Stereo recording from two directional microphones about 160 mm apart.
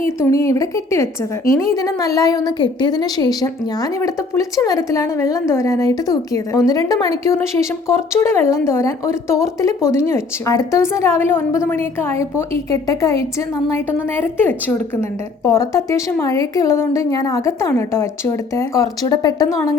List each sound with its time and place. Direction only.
0.0 s a woman's voice: 15° left (ahead or behind)